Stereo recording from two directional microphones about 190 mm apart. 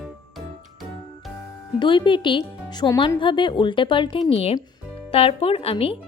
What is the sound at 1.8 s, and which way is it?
Speech, 25° left (ahead or behind).